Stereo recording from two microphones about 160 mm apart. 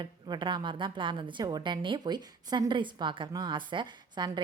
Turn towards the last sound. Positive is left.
turn(degrees=-30)  # may be behind; listen again after turning